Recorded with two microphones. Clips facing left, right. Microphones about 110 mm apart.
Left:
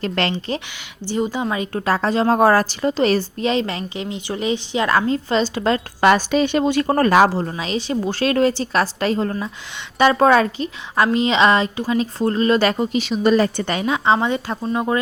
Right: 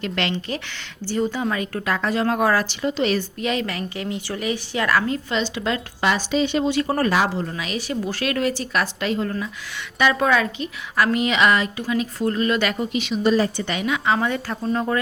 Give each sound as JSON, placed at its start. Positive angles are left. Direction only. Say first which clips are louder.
{"t": 0.0, "sound": "a woman's voice", "louder": "left 3 dB", "side_deg": 35}
{"t": 0.7, "sound": "a woman's voice", "louder": "left 1 dB", "side_deg": 20}
{"t": 7.3, "sound": "a woman's voice", "louder": "left 4 dB", "side_deg": 30}
{"t": 13.2, "sound": "a woman's voice", "louder": "left 3 dB", "side_deg": 55}
{"t": 13.7, "sound": "a woman's voice", "louder": "left 4 dB", "side_deg": 35}
{"t": 14.6, "sound": "speech", "louder": "right 2 dB", "side_deg": 10}